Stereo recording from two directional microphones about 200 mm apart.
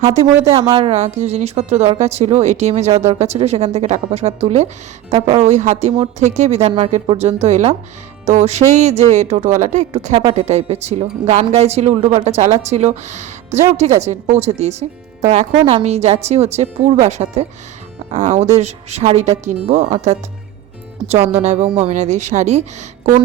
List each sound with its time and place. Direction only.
0.0 s speech: 35° right (ahead or behind)
0.6 s speech: 25° right (ahead or behind)
21.4 s speech: 35° right (ahead or behind)